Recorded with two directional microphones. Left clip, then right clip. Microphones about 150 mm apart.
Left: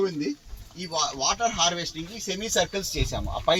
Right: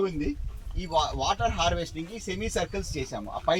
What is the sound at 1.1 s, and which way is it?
Speech, 50° right (ahead or behind).